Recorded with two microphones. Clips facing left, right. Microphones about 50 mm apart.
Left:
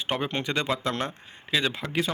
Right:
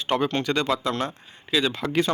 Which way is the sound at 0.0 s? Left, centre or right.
Left.